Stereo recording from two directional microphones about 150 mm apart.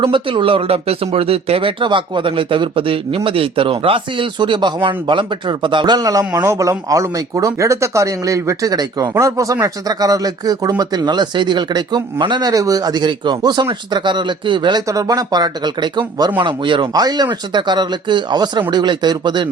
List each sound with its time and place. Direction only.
0.0 s speech: 35° right (ahead or behind)